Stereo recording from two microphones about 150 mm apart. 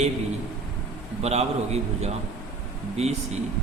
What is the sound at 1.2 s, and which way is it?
A man's voice, 45° right (ahead or behind).